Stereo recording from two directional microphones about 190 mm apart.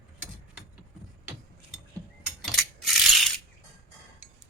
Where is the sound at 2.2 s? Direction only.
Centre (ahead or behind).